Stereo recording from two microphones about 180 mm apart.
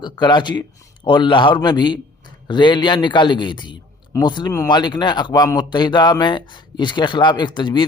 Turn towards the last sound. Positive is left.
turn(degrees=25)  # may be behind; listen again after turning